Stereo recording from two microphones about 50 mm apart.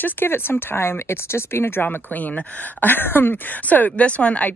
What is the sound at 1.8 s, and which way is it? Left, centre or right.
Speech, left.